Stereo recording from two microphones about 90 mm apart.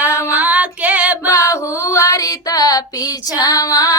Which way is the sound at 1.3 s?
35° left (ahead or behind).